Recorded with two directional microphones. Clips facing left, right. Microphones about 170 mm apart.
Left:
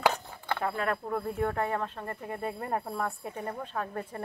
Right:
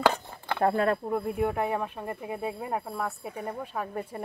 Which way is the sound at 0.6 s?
40° right (ahead or behind).